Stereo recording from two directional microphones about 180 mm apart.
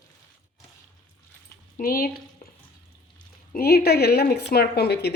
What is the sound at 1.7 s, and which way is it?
Speech, 55° left (ahead or behind).